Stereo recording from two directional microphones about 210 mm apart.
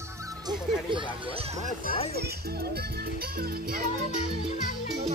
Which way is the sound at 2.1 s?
50° right (ahead or behind).